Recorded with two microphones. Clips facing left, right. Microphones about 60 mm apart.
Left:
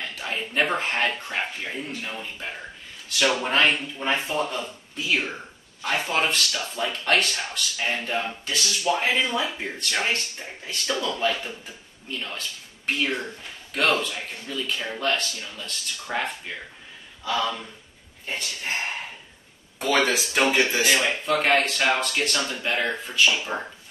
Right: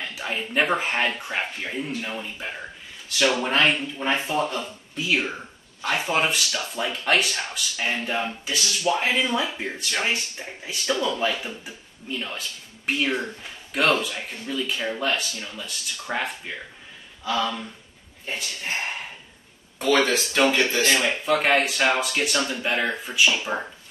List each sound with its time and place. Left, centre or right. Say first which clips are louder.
0.0 s speech: right 1 dB; centre
1.9 s speech: right 3 dB; centre
2.1 s speech: right 2 dB; centre